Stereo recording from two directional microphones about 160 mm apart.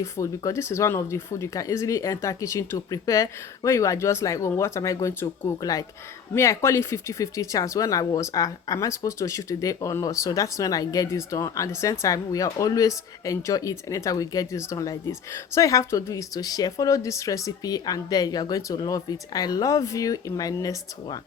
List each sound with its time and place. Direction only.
0.0 s speech: 20° left (ahead or behind)